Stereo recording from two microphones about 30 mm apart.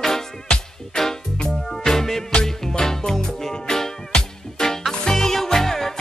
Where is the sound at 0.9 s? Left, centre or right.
Left.